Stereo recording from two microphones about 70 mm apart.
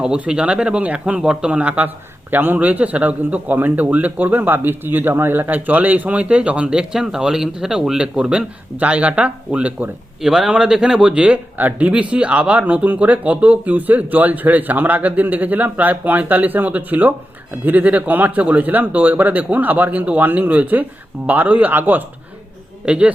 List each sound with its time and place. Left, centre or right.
0.0 s a man's voice: centre
10.2 s a man's voice: centre; by 22.0 s right
22.9 s speech: centre